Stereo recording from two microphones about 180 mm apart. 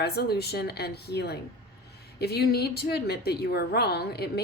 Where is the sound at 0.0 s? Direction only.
60° left (ahead or behind).